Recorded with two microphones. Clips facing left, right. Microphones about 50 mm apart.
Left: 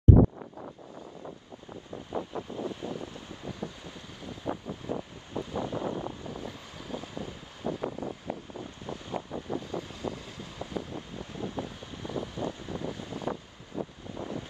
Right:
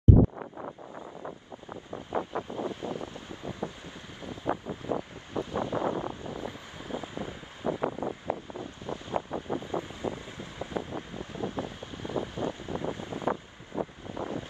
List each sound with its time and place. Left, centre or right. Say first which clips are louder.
0.4 s wind: right 3 dB; right
0.9 s wind noise: right 3 dB; right
4.9 s wind: right 4 dB; right
8.0 s wind noise: right 4 dB; right